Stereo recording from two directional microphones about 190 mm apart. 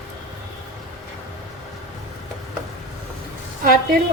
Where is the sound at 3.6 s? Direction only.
50° right (ahead or behind).